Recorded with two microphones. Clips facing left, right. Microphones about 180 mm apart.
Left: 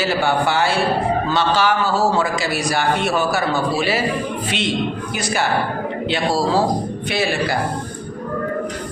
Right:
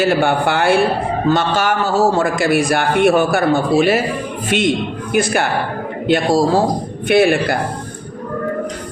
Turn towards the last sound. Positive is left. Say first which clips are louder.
# right 7 dB
turn(degrees=-55)  # may be behind; listen again after turning